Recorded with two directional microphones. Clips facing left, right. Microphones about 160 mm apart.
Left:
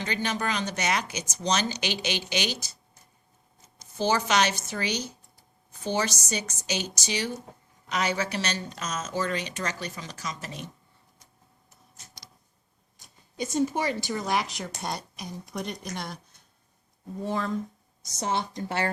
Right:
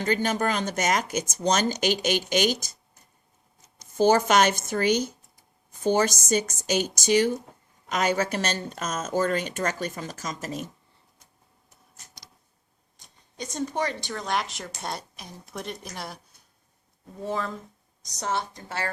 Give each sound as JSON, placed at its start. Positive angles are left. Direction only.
{"t": 0.0, "sound": "speech", "side_deg": -45}
{"t": 3.9, "sound": "speech", "side_deg": -50}
{"t": 13.0, "sound": "speech", "side_deg": 10}
{"t": 18.2, "sound": "a woman's voice", "side_deg": 15}